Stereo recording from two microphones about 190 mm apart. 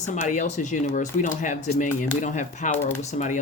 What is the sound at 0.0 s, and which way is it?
Speech, 40° left (ahead or behind).